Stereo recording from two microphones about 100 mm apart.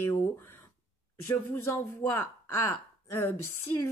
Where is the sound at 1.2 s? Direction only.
25° left (ahead or behind).